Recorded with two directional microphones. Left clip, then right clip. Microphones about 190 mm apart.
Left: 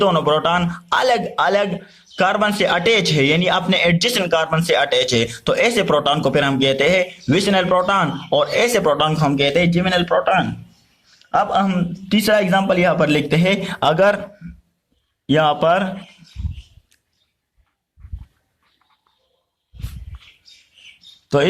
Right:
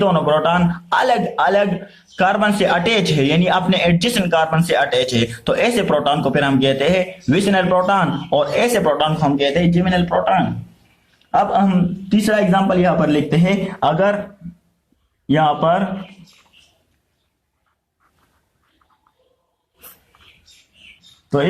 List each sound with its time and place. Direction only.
0.0 s a man's voice: 40° left (ahead or behind)
15.3 s a man's voice: 55° left (ahead or behind)